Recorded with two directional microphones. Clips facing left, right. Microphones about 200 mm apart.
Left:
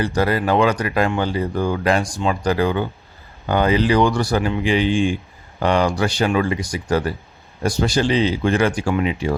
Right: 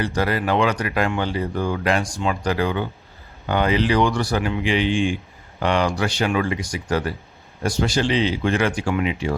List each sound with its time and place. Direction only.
0.0 s speech: 35° left (ahead or behind)